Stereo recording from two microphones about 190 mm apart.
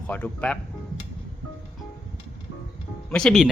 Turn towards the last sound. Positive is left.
turn(degrees=0)  # may be behind; listen again after turning